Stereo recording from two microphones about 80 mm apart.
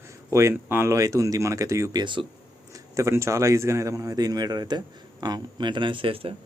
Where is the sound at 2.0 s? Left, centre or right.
Right.